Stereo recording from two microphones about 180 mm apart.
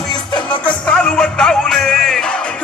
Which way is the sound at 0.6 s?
5° left (ahead or behind).